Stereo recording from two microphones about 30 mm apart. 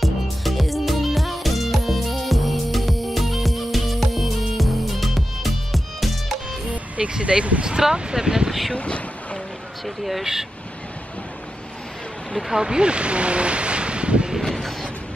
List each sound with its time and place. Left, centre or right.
0.0 s music: centre
7.0 s speech: right
7.8 s speech: right
8.5 s speech: centre
8.7 s a sound: left
9.8 s speech: centre
12.4 s speech: right